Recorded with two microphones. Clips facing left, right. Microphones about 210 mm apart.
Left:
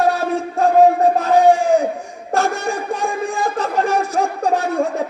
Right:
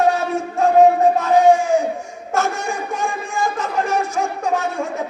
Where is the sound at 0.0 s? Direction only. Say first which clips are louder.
Even; 35° left (ahead or behind).